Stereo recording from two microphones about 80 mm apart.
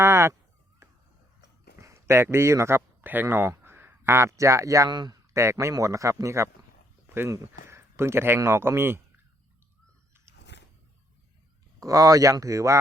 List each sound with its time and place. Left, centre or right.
0.0 s a sound: right
1.8 s a man's voice: right
4.9 s speech: right
5.3 s speech: right
7.1 s speech: right
11.8 s speech: right